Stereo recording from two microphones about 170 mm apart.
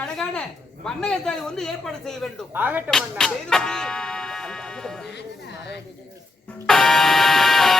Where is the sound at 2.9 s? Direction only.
Centre (ahead or behind).